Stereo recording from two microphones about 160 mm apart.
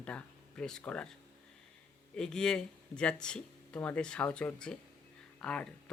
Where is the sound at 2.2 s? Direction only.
5° left (ahead or behind).